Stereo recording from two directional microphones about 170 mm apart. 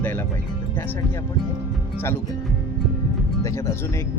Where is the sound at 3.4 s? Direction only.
15° left (ahead or behind).